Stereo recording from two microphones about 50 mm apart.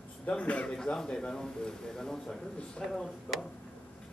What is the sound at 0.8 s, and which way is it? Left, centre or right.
A man's voice, centre.